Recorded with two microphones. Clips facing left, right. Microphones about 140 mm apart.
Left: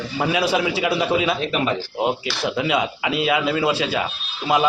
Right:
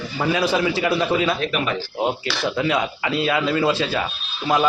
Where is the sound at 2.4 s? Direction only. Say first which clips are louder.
Even; 10° left (ahead or behind).